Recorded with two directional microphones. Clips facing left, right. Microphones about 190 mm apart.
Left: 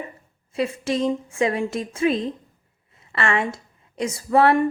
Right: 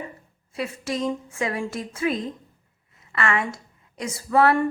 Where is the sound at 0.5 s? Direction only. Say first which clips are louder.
Left 5 dB; 25° left (ahead or behind).